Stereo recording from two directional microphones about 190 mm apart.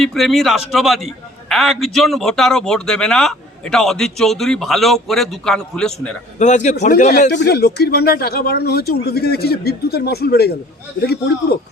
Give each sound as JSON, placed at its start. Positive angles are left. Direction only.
{"t": 0.0, "sound": "a man's voice", "side_deg": 0}
{"t": 6.4, "sound": "a man's voice", "side_deg": 40}
{"t": 7.3, "sound": "speech", "side_deg": 60}